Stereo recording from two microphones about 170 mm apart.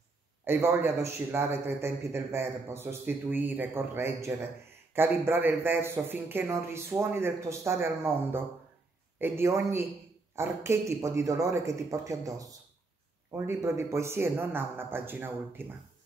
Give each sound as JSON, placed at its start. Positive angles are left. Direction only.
{"t": 0.5, "sound": "a man's voice", "side_deg": -15}